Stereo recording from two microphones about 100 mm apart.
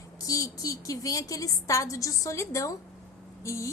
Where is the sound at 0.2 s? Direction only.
35° left (ahead or behind).